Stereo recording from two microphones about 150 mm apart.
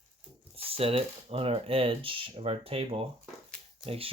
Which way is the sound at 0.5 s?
40° right (ahead or behind).